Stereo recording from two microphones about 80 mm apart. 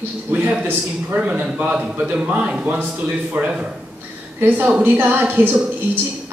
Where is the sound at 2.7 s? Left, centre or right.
Right.